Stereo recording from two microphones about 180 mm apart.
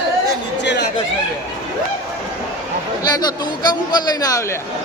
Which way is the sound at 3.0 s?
20° left (ahead or behind).